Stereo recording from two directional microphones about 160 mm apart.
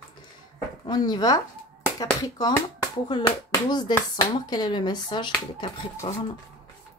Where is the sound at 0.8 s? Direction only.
25° left (ahead or behind).